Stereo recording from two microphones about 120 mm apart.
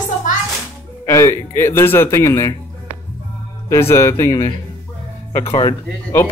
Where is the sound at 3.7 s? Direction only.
20° left (ahead or behind).